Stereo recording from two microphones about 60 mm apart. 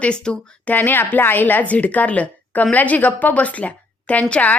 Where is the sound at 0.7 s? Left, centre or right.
Left.